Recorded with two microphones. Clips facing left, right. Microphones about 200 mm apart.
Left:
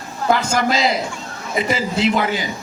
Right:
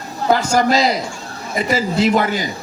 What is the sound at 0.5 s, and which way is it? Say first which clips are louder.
A man's voice: right 3 dB; 40° right (ahead or behind).